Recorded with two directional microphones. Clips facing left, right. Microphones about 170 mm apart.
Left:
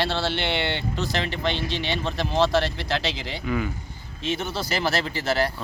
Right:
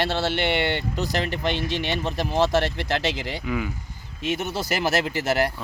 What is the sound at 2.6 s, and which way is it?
Speech, 50° right (ahead or behind).